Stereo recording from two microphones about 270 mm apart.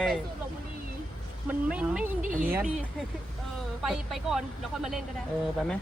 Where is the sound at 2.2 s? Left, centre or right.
Right.